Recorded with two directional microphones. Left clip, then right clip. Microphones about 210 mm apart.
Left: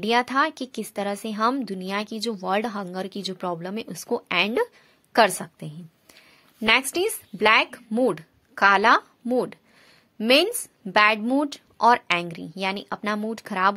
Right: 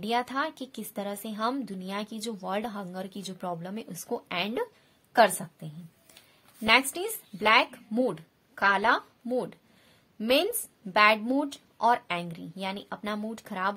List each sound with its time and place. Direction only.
0.0 s speech: 30° left (ahead or behind)